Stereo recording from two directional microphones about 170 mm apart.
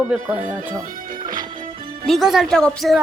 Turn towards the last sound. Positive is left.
turn(degrees=0)  # may be behind; listen again after turning